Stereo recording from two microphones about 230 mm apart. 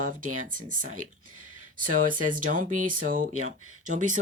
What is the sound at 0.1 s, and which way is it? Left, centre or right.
Speech, right.